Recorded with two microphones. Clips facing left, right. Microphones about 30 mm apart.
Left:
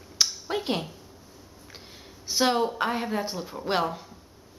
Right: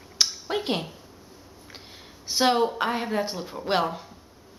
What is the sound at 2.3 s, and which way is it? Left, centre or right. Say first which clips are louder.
Speech: right 2 dB; centre.